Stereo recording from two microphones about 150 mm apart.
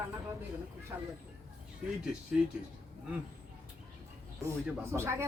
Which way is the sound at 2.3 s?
5° right (ahead or behind).